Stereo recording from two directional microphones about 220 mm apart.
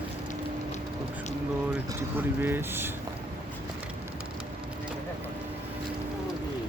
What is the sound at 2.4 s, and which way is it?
Speech, 10° right (ahead or behind).